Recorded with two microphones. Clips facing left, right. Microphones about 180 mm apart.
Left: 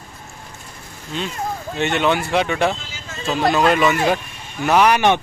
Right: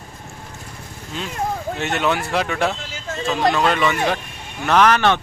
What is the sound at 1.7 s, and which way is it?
Speech, centre (ahead or behind).